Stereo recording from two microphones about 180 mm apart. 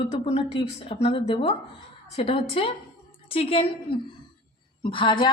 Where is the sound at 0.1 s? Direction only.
35° left (ahead or behind).